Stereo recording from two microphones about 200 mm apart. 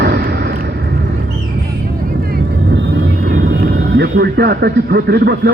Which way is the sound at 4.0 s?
55° right (ahead or behind).